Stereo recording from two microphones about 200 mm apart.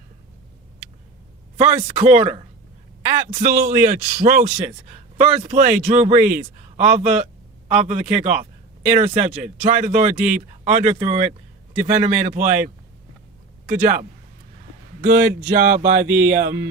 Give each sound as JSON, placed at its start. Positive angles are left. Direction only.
{"t": 1.5, "sound": "a man's voice", "side_deg": -30}
{"t": 13.7, "sound": "a man's voice", "side_deg": -40}
{"t": 15.0, "sound": "speech", "side_deg": -50}
{"t": 16.1, "sound": "mantra", "side_deg": -55}